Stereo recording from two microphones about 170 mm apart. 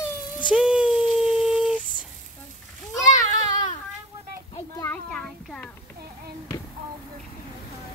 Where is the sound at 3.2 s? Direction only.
45° left (ahead or behind).